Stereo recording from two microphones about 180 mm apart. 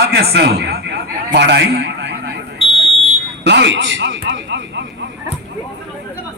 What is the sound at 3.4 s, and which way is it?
A man's voice, 75° right (ahead or behind).